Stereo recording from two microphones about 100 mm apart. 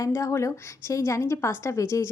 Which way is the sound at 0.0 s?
30° left (ahead or behind).